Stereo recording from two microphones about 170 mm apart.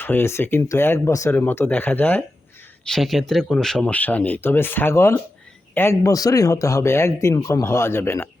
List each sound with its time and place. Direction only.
0.0 s speech: 15° left (ahead or behind)